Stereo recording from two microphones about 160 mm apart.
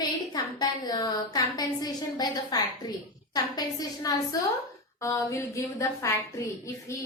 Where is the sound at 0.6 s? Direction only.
25° left (ahead or behind).